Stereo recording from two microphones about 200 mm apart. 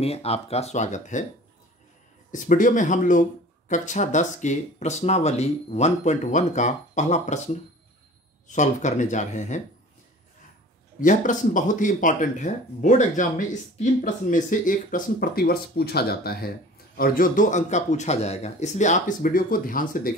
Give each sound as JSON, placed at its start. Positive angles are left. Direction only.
{"t": 0.0, "sound": "speech", "side_deg": 30}
{"t": 2.3, "sound": "speech", "side_deg": 40}
{"t": 11.0, "sound": "speech", "side_deg": 40}